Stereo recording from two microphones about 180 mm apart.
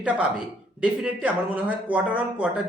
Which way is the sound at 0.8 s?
5° right (ahead or behind).